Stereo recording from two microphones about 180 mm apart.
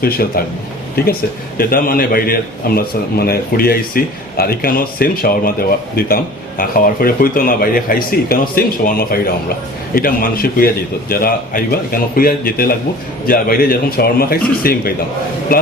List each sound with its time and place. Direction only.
0.0 s a man's voice: 55° left (ahead or behind)
1.5 s a man's voice: 55° left (ahead or behind)